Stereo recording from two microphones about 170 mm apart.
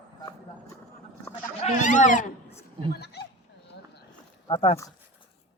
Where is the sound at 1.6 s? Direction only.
45° left (ahead or behind).